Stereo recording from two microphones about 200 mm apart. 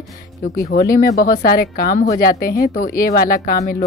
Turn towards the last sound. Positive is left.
turn(degrees=45)  # may be behind; listen again after turning